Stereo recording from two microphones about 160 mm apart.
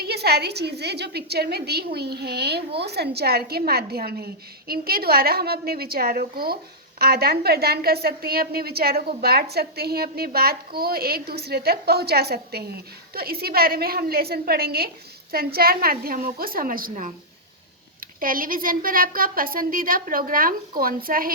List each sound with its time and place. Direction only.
0.0 s a woman's voice: 85° right; by 16.9 s 60° right (ahead or behind)
18.0 s a woman's voice: 60° right (ahead or behind)